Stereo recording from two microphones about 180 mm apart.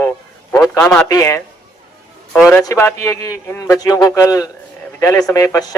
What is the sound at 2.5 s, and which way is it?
A man's voice, 15° left (ahead or behind).